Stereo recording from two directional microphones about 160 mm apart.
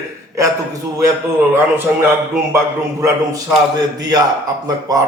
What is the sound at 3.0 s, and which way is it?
A man's voice, 20° right (ahead or behind).